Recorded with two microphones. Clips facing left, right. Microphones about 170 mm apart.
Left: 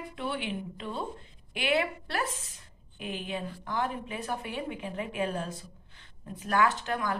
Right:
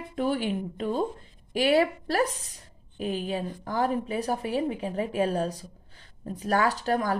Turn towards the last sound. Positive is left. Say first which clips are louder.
# right 4 dB
turn(degrees=-35)  # may be behind; listen again after turning